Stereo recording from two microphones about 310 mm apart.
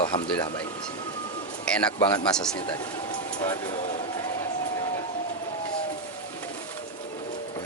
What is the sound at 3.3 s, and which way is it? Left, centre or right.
Speech, centre.